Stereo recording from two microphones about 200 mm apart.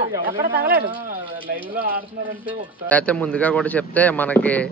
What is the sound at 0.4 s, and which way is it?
Speech, 50° right (ahead or behind).